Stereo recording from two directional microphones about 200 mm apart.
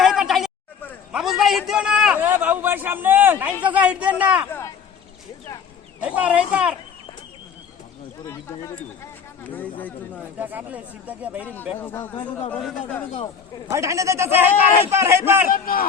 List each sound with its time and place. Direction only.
0.0 s a sound: centre (ahead or behind)
3.6 s speech: 5° right (ahead or behind)
4.4 s a sound: 10° left (ahead or behind)
6.0 s speech: 5° right (ahead or behind)
8.3 s speech: 15° left (ahead or behind)
10.3 s speech: 10° right (ahead or behind)
11.8 s speech: 10° left (ahead or behind)
12.1 s speech: 25° left (ahead or behind)
12.5 s a man's voice: 5° left (ahead or behind)
13.7 s speech: 15° right (ahead or behind)
15.4 s speech: 45° left (ahead or behind)